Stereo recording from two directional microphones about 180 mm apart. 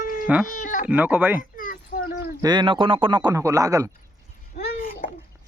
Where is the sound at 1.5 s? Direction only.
50° left (ahead or behind).